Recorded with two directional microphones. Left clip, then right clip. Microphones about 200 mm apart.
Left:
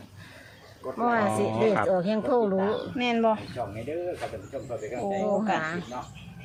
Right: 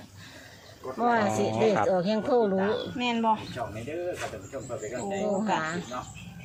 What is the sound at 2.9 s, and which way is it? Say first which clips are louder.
Speech: left 3 dB; 55° left (ahead or behind).